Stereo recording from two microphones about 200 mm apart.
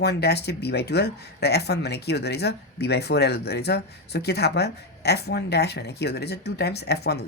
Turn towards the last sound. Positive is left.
turn(degrees=55)  # may be behind; listen again after turning